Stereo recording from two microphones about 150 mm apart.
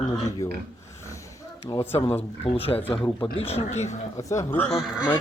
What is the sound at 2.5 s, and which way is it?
Speech, 40° left (ahead or behind).